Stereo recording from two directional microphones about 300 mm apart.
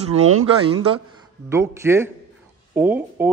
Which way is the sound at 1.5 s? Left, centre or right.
Centre.